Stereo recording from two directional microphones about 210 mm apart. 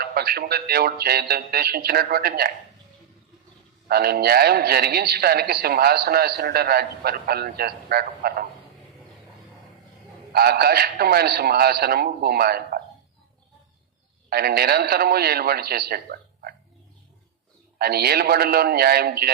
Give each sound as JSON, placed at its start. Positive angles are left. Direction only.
{"t": 0.0, "sound": "a man's voice", "side_deg": -50}
{"t": 3.8, "sound": "a man's voice", "side_deg": -50}
{"t": 10.3, "sound": "a man's voice", "side_deg": -50}
{"t": 14.3, "sound": "a man's voice", "side_deg": -45}
{"t": 17.7, "sound": "a man's voice", "side_deg": -50}